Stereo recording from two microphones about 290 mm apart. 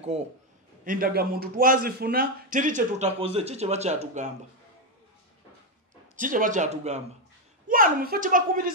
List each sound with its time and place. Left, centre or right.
0.8 s a man's voice: right
6.1 s a man's voice: right